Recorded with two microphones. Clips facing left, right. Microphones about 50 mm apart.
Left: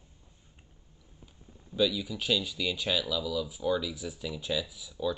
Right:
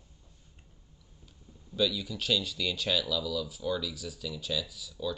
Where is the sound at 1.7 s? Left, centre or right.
Centre.